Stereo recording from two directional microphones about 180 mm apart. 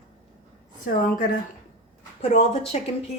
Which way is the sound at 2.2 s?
35° left (ahead or behind).